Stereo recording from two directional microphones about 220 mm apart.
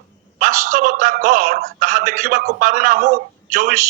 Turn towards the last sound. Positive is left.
turn(degrees=-35)  # may be behind; listen again after turning